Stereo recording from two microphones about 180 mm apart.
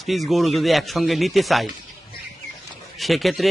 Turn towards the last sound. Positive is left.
turn(degrees=0)  # may be behind; listen again after turning